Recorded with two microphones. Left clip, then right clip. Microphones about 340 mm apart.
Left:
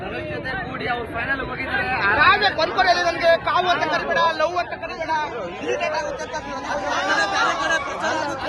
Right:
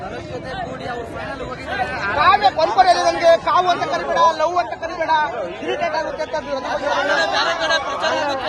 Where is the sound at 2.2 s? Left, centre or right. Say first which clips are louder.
Right 5 dB; right.